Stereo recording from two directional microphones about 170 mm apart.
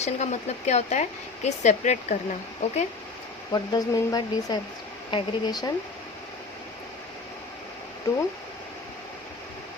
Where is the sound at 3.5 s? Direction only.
25° left (ahead or behind).